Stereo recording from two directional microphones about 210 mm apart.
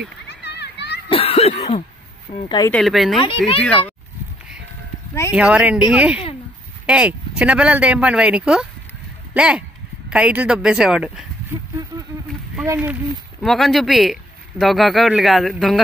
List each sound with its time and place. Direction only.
0.3 s a sound: 55° left (ahead or behind)
1.0 s cough: 30° left (ahead or behind)
2.7 s speech: centre (ahead or behind)
3.2 s a child's voice: 25° left (ahead or behind)
3.6 s a child's voice: 5° left (ahead or behind)
5.3 s speech: 5° right (ahead or behind)
12.6 s speech: 10° right (ahead or behind)
13.4 s speech: centre (ahead or behind)